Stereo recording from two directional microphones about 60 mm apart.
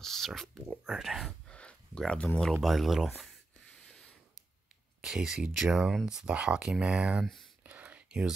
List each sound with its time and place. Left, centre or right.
0.0 s speech: centre
1.5 s a sound: centre
2.1 s speech: centre
2.6 s speech: centre
3.6 s writing: centre
5.0 s speech: centre
7.6 s a sound: right